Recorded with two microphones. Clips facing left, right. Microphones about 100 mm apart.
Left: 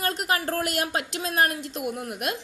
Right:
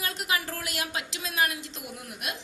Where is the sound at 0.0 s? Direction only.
45° left (ahead or behind).